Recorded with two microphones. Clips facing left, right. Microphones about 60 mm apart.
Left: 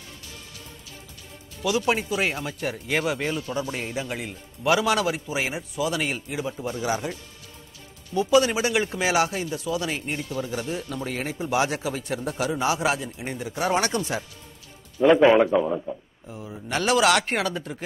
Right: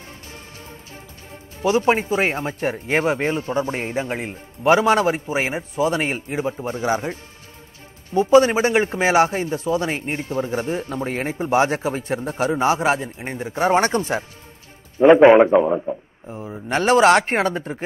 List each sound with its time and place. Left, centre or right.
1.3 s a man's voice: right